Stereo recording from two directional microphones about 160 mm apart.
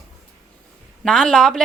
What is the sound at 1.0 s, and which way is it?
Speech, 5° left (ahead or behind).